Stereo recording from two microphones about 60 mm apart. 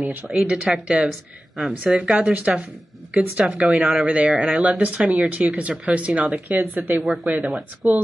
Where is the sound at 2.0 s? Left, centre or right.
Centre.